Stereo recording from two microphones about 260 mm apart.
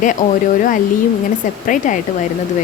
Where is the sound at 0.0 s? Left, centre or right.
Left.